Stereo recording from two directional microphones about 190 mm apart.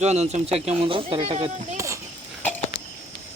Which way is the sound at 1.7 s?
15° right (ahead or behind).